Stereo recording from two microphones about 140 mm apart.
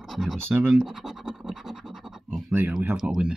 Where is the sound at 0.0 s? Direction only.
Centre (ahead or behind).